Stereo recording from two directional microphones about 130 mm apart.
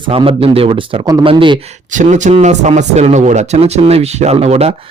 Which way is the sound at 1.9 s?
70° right (ahead or behind).